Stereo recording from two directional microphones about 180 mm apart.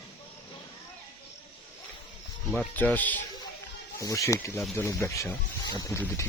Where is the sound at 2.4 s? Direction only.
10° left (ahead or behind).